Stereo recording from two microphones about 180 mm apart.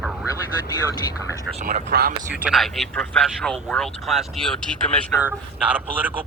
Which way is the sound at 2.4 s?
Centre (ahead or behind).